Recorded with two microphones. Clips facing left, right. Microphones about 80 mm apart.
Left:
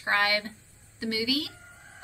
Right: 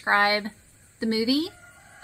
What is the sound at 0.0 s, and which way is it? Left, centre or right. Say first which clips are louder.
A woman's voice: right 5 dB; right.